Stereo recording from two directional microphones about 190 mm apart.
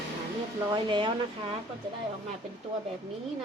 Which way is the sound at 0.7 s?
25° right (ahead or behind).